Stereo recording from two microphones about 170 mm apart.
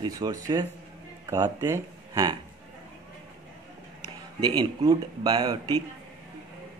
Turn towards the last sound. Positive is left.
turn(degrees=-25)  # may be behind; listen again after turning